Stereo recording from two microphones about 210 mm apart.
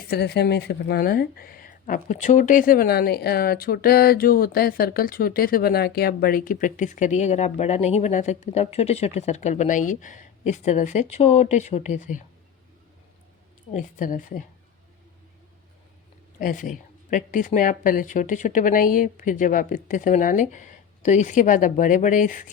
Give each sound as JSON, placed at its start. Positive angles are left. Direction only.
{"t": 0.1, "sound": "speech", "side_deg": 50}
{"t": 13.7, "sound": "speech", "side_deg": 40}
{"t": 16.4, "sound": "speech", "side_deg": 40}